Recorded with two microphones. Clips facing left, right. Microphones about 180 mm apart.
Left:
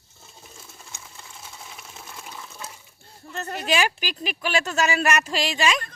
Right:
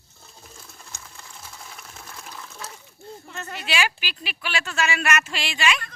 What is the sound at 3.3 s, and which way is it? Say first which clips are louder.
Speech: left 5 dB; 40° left (ahead or behind).